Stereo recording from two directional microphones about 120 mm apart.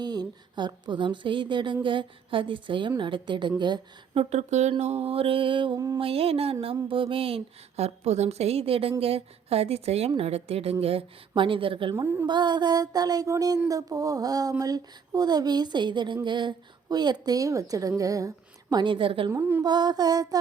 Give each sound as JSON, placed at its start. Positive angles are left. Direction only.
{"t": 0.0, "sound": "a woman's voice", "side_deg": -35}
{"t": 4.1, "sound": "speech", "side_deg": -60}
{"t": 4.8, "sound": "a woman's voice", "side_deg": -60}
{"t": 11.9, "sound": "a woman's voice", "side_deg": -20}
{"t": 12.2, "sound": "a woman's voice", "side_deg": -35}
{"t": 19.3, "sound": "a woman's voice", "side_deg": -20}
{"t": 19.6, "sound": "a woman's voice", "side_deg": -35}